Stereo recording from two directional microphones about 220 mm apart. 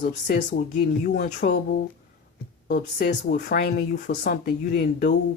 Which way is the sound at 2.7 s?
50° left (ahead or behind).